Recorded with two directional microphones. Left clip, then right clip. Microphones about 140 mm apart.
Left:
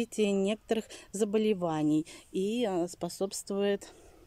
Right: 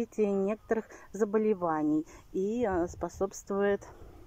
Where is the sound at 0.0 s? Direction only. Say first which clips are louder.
Even; 45° left (ahead or behind).